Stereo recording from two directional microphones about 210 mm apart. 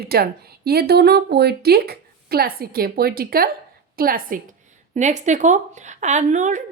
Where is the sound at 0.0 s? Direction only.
50° right (ahead or behind).